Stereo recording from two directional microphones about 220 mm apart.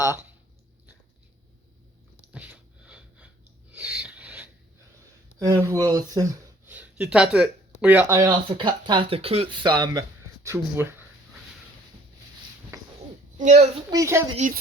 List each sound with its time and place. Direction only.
2.3 s a sound: 5° right (ahead or behind)
5.4 s speech: 15° right (ahead or behind)
13.4 s a woman's voice: 30° right (ahead or behind)
13.9 s speech: 15° right (ahead or behind)
14.3 s a woman's voice: 35° right (ahead or behind)